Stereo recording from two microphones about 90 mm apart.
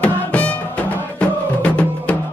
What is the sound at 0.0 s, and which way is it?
Music, 15° left (ahead or behind).